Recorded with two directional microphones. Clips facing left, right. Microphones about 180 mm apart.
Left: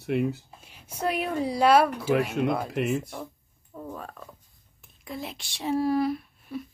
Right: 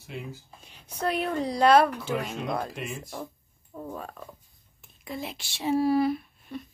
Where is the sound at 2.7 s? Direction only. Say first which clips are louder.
Left 10 dB; 65° left (ahead or behind).